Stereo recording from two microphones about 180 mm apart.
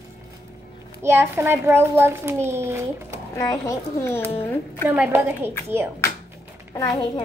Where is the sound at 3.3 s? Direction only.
15° left (ahead or behind).